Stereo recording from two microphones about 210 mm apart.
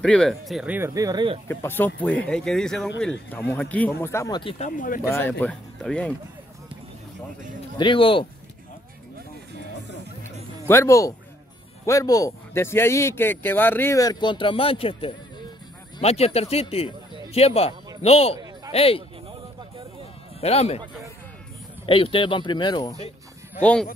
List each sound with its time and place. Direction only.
0.0 s speech: 5° left (ahead or behind); by 1.4 s 20° right (ahead or behind)
1.5 s speech: 10° left (ahead or behind)
4.6 s speech: 40° left (ahead or behind)
5.4 s speech: 5° left (ahead or behind)
7.7 s speech: 25° left (ahead or behind)
10.2 s music: 10° left (ahead or behind)
11.8 s speech: 15° left (ahead or behind)
20.3 s speech: 30° left (ahead or behind)
21.8 s speech: 25° left (ahead or behind)
23.6 s speech: 5° left (ahead or behind)